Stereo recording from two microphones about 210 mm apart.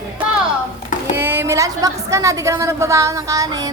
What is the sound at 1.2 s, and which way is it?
A woman's voice, 10° right (ahead or behind).